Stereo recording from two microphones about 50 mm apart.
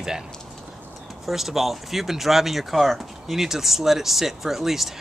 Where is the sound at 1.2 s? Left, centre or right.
Centre.